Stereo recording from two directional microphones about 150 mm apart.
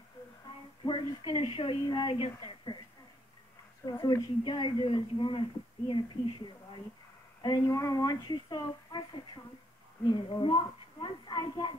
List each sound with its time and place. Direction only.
0.8 s speech: 35° left (ahead or behind)
4.0 s speech: 30° left (ahead or behind)
7.6 s a woman's voice: 20° left (ahead or behind)
10.0 s speech: 30° left (ahead or behind)